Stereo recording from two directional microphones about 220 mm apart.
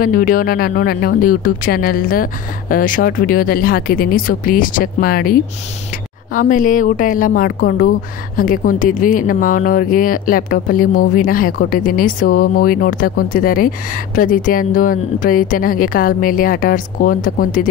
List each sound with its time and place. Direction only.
0.0 s speech: 40° left (ahead or behind)
6.3 s speech: 35° left (ahead or behind)